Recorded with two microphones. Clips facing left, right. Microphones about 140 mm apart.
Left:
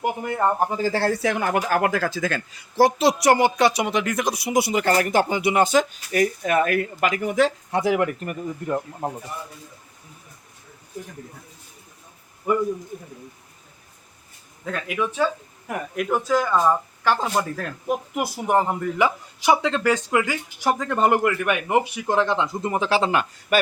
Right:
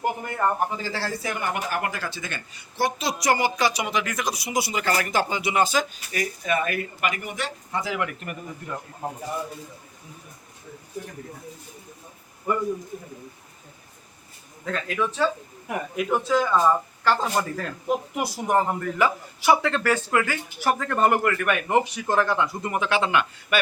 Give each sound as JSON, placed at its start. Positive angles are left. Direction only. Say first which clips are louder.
{"t": 0.0, "sound": "speech", "louder": "left 2 dB", "side_deg": 20}
{"t": 0.8, "sound": "speech", "louder": "left 8 dB", "side_deg": 50}
{"t": 8.0, "sound": "speech", "louder": "left 7 dB", "side_deg": 40}
{"t": 14.6, "sound": "speech", "louder": "left 1 dB", "side_deg": 10}
{"t": 15.6, "sound": "speech", "louder": "left 1 dB", "side_deg": 0}